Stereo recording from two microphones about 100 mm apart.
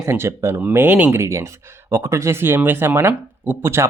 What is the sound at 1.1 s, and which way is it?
Speech, 30° right (ahead or behind).